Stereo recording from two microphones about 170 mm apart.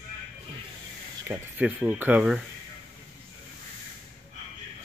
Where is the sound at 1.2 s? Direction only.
10° right (ahead or behind).